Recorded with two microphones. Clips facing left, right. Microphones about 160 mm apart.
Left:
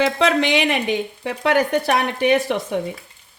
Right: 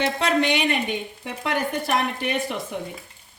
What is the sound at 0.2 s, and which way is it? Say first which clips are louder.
Speech: left 4 dB; 90° left.